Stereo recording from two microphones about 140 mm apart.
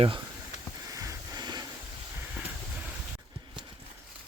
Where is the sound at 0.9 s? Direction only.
25° right (ahead or behind).